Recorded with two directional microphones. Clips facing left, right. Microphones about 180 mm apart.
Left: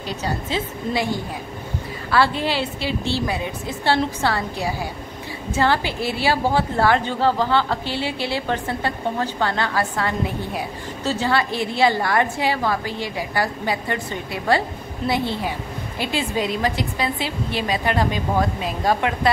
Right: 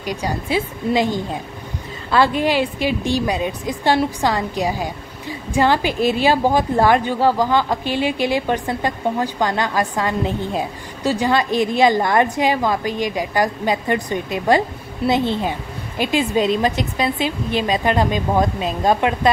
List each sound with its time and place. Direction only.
0.0 s a woman's voice: 15° right (ahead or behind)